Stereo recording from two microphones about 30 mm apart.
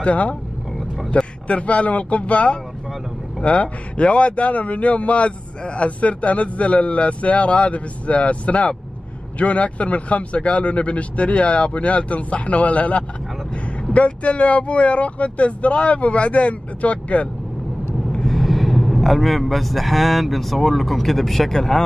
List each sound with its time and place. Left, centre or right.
0.0 s a man's voice: left
0.7 s vehicle: centre
1.1 s a man's voice: left
18.3 s speech: centre